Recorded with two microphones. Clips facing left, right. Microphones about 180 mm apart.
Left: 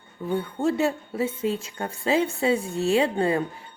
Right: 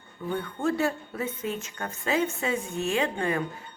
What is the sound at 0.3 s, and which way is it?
A woman's voice, 25° left (ahead or behind).